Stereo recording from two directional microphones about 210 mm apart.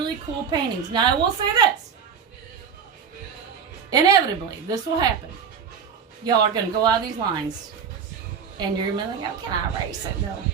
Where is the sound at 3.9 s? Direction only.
20° right (ahead or behind).